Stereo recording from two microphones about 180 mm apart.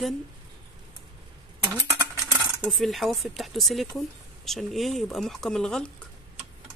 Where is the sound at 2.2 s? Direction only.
5° right (ahead or behind).